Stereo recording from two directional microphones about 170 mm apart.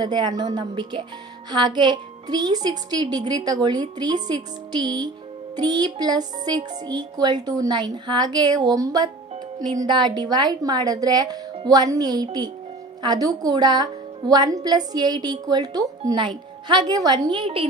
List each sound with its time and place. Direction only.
0.0 s speech: 25° right (ahead or behind)